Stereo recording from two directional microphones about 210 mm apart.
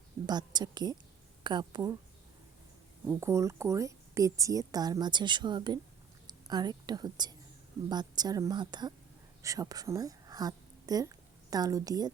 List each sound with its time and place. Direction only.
0.3 s a woman's voice: 20° right (ahead or behind)
3.1 s a woman's voice: 15° right (ahead or behind)